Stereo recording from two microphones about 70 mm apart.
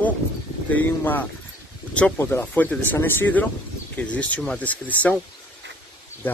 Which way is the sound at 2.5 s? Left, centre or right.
Left.